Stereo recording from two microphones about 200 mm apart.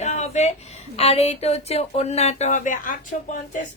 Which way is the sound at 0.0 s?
35° left (ahead or behind).